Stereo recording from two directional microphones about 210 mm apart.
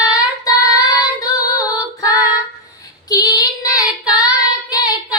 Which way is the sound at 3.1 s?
15° left (ahead or behind).